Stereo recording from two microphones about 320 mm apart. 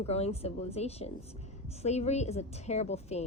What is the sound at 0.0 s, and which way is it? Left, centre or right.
A woman's voice, centre.